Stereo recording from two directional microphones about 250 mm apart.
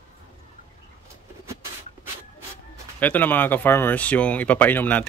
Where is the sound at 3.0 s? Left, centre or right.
Centre.